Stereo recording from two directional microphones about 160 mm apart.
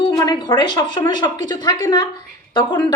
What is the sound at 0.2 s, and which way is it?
A woman's voice, 25° left (ahead or behind).